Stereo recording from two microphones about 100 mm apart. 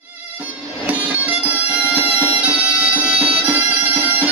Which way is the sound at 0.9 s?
15° right (ahead or behind).